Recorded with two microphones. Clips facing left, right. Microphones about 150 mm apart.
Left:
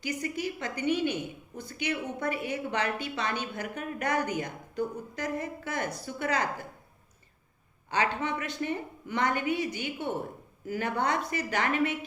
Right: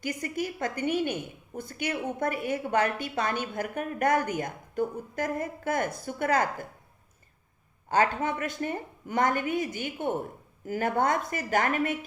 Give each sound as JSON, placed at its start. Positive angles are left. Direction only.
{"t": 0.0, "sound": "a woman's voice", "side_deg": -50}
{"t": 7.9, "sound": "a woman's voice", "side_deg": -45}